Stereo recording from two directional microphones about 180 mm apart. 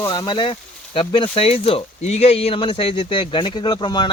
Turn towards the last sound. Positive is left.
turn(degrees=25)  # may be behind; listen again after turning